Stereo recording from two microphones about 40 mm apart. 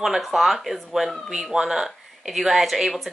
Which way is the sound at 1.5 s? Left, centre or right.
Centre.